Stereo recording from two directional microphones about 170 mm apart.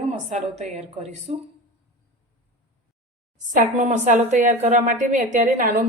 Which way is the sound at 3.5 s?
50° right (ahead or behind).